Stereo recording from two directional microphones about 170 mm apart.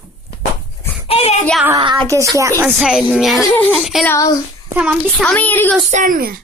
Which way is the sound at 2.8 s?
5° right (ahead or behind).